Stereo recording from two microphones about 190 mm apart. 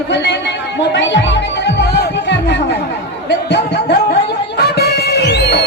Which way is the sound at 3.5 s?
65° left (ahead or behind).